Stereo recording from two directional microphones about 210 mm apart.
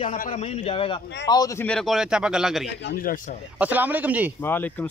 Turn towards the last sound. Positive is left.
turn(degrees=10)  # may be behind; listen again after turning